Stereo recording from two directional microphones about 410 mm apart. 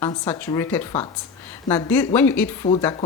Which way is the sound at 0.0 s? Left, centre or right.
Centre.